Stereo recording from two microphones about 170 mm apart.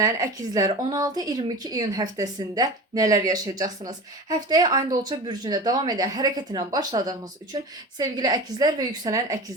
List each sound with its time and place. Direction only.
0.0 s speech: 20° right (ahead or behind)